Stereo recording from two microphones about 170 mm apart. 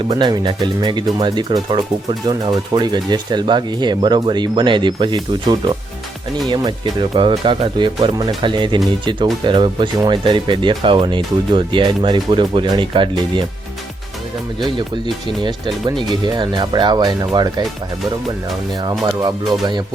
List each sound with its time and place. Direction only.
0.1 s speech: 25° right (ahead or behind)
14.8 s speech: 30° right (ahead or behind)
18.7 s speech: 25° right (ahead or behind)